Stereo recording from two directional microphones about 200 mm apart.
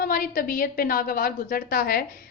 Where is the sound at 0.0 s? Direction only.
45° left (ahead or behind).